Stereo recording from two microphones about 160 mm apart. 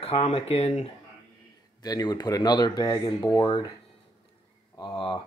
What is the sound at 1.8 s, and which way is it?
Speech, 25° left (ahead or behind).